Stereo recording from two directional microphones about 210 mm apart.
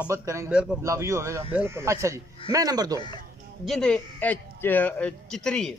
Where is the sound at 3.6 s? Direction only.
Centre (ahead or behind).